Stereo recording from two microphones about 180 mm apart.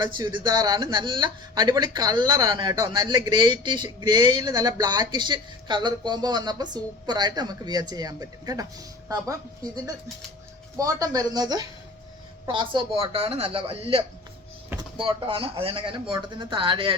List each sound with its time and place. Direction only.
0.0 s a woman's voice: 25° right (ahead or behind)
10.8 s speech: 20° right (ahead or behind)